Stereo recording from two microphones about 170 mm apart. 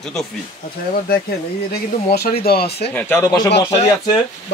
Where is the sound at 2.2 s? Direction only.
65° left (ahead or behind).